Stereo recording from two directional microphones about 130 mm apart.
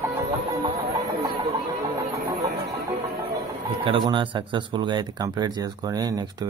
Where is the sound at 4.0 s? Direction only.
40° right (ahead or behind).